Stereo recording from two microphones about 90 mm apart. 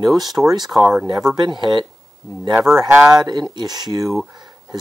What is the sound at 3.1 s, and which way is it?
Speech, 50° right (ahead or behind).